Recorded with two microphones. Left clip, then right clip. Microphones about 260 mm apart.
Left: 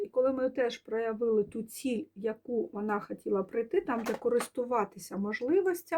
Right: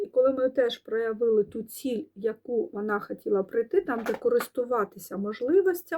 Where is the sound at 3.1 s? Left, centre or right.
Centre.